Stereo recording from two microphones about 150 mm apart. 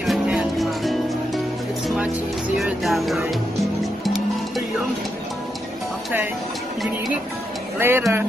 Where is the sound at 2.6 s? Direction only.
Centre (ahead or behind).